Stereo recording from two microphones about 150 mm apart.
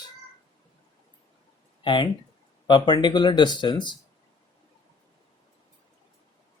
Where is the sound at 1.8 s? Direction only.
35° left (ahead or behind).